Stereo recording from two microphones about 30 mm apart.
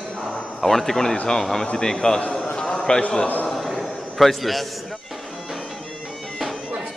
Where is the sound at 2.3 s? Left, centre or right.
Left.